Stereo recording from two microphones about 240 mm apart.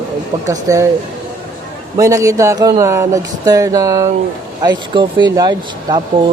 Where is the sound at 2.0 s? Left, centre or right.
Centre.